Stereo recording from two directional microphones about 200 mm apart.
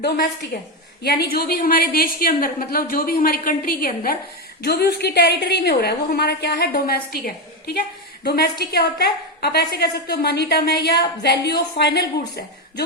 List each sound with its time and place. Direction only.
0.5 s a woman's voice: 50° left (ahead or behind)